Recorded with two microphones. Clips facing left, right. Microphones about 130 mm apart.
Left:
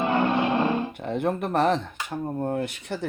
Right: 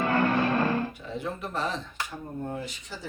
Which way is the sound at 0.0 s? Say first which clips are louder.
Left 2 dB; 20° left (ahead or behind).